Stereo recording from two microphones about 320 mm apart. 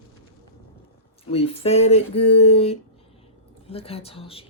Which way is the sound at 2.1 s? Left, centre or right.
Left.